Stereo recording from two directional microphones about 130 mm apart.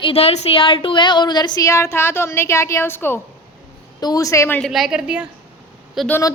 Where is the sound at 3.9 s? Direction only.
30° left (ahead or behind).